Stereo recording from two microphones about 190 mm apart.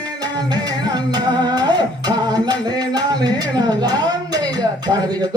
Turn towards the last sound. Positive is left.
turn(degrees=-20)  # may be behind; listen again after turning